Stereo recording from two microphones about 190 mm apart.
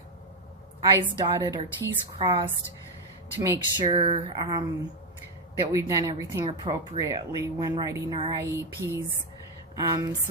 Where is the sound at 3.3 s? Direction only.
15° right (ahead or behind).